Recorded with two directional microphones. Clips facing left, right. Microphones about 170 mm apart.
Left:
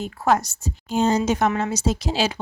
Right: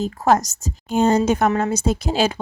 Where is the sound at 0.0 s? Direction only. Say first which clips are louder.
Right 3 dB; 45° right (ahead or behind).